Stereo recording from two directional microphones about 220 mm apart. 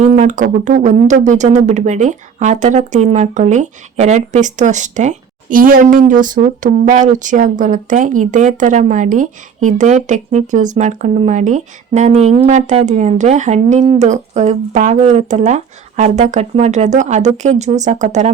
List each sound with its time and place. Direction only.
0.0 s speech: 35° right (ahead or behind)